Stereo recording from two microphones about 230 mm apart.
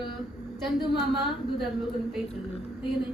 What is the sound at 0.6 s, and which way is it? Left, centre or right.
A man's voice, centre.